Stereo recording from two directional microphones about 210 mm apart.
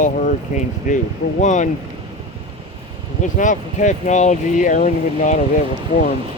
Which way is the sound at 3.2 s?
35° left (ahead or behind).